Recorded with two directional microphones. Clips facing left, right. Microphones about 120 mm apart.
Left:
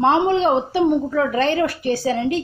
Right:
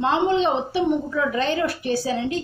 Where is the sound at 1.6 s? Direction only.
50° left (ahead or behind).